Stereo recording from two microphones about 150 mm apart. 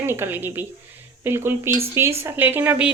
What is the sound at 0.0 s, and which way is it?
Speech, 15° right (ahead or behind).